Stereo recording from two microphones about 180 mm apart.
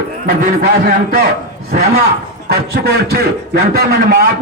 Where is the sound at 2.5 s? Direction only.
60° right (ahead or behind).